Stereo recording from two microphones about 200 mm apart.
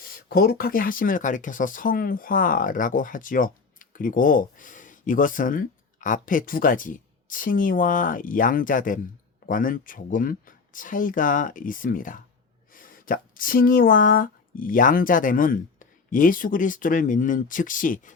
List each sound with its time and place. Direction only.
0.0 s speech: 50° left (ahead or behind)